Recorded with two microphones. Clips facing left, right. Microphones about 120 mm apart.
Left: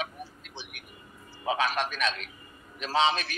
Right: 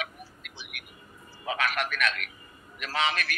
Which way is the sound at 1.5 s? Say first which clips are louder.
Left 2 dB; 25° left (ahead or behind).